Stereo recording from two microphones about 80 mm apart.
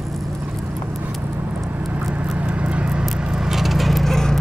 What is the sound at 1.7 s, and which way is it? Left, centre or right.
Vehicle, centre.